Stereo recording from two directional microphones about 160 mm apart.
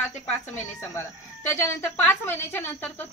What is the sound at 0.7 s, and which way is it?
A woman's voice, 15° left (ahead or behind).